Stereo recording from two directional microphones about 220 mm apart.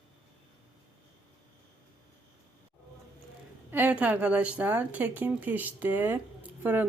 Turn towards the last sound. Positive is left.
turn(degrees=-10)  # may be behind; listen again after turning